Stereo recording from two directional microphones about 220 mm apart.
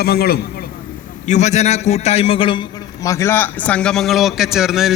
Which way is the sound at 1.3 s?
30° left (ahead or behind).